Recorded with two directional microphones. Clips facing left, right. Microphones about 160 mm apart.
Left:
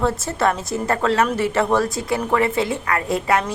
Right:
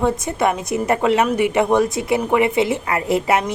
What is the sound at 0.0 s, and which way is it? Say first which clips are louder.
A woman's voice: right 1 dB; 15° right (ahead or behind).